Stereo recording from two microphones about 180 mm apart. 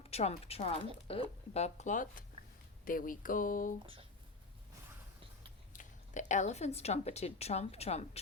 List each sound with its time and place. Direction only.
0.1 s speech: 35° left (ahead or behind)
5.7 s a woman's voice: 40° left (ahead or behind)